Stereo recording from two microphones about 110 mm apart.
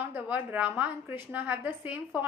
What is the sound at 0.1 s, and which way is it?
A woman's voice, 15° right (ahead or behind).